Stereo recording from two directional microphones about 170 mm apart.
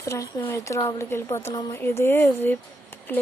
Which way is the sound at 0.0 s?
20° left (ahead or behind).